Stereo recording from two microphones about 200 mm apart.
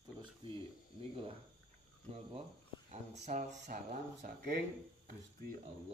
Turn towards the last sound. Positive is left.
turn(degrees=-40)  # may be behind; listen again after turning